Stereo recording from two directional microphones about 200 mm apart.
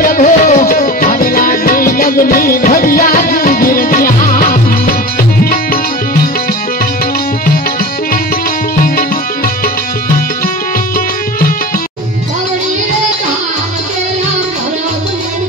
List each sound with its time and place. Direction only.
0.0 s music: 40° left (ahead or behind)